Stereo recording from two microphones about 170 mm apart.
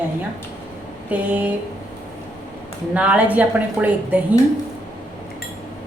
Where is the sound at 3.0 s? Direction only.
10° right (ahead or behind).